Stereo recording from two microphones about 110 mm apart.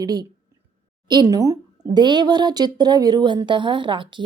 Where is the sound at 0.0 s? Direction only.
35° right (ahead or behind).